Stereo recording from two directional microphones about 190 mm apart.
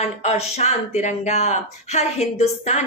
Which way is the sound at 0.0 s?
35° left (ahead or behind).